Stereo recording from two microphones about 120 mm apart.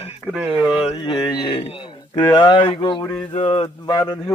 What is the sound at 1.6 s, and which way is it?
A man's voice, 50° left (ahead or behind).